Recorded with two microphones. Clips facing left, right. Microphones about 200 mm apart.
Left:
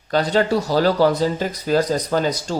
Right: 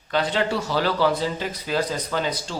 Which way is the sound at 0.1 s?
40° left (ahead or behind).